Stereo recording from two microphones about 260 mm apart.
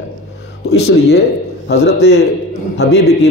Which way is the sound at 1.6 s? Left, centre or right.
Left.